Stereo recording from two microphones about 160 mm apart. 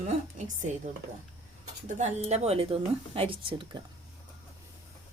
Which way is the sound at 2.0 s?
45° right (ahead or behind).